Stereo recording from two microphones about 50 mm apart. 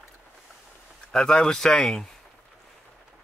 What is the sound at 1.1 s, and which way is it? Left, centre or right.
Speech, centre.